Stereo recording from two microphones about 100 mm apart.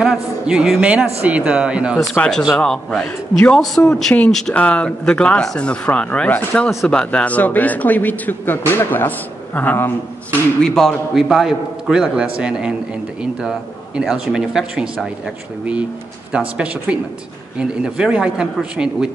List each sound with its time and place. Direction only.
0.0 s a man's voice: 5° right (ahead or behind)
2.1 s a man's voice: 5° left (ahead or behind)
10.6 s a man's voice: 5° left (ahead or behind); by 19.0 s 10° right (ahead or behind)